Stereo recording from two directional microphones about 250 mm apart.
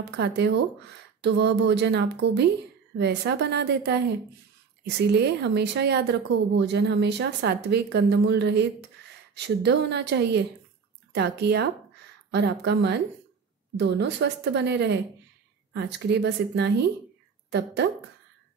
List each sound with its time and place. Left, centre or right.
0.0 s a woman's voice: right